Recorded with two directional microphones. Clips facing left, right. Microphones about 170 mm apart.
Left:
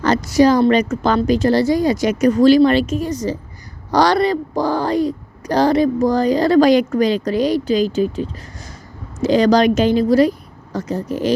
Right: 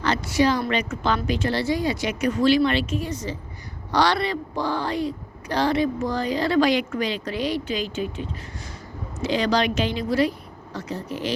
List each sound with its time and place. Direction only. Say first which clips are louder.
0.0 s a woman's voice: left 8 dB; 40° left (ahead or behind)